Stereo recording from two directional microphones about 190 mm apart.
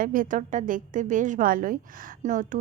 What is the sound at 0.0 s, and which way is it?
A woman's voice, 45° right (ahead or behind).